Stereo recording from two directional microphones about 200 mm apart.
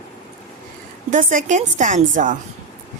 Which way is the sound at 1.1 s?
40° right (ahead or behind).